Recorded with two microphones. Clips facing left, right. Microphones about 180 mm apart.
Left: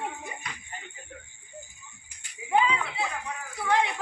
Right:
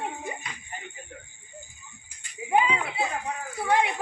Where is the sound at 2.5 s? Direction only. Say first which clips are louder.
Right 1 dB; 20° right (ahead or behind).